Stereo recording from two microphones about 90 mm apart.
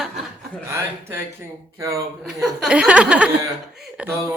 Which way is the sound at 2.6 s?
10° right (ahead or behind).